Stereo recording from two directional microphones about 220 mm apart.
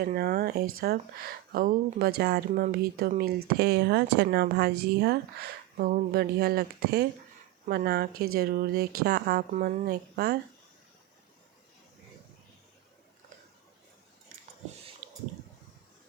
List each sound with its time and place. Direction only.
0.0 s speech: 40° right (ahead or behind)